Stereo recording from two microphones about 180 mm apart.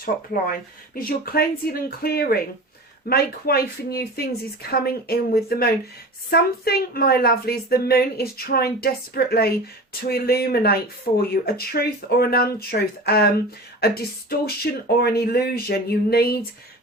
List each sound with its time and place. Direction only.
0.0 s a woman's voice: 50° left (ahead or behind)
13.8 s a woman's voice: 60° left (ahead or behind)